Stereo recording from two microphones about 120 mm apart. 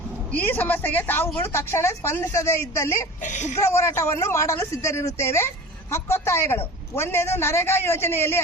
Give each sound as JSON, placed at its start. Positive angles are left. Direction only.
{"t": 0.3, "sound": "a man's voice", "side_deg": 15}
{"t": 3.2, "sound": "speech", "side_deg": 80}
{"t": 3.6, "sound": "speech", "side_deg": 25}